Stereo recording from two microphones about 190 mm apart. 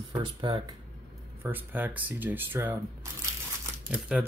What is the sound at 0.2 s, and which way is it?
Speech, 25° right (ahead or behind).